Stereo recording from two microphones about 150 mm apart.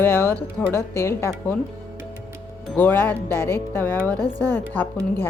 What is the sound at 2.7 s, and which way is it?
Speech, 10° left (ahead or behind).